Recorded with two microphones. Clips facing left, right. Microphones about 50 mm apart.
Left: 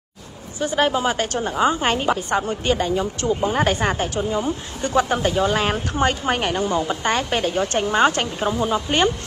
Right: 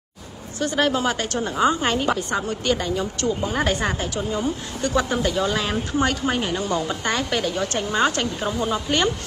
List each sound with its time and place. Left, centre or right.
0.6 s speech: centre
1.1 s a woman's voice: left
1.5 s speech: centre
1.8 s a woman's voice: left
3.3 s a woman's voice: left
4.2 s speech: centre
4.8 s a woman's voice: left
6.7 s a woman's voice: left
8.5 s speech: centre